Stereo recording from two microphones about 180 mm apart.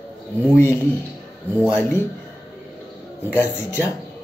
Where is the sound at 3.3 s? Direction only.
10° left (ahead or behind).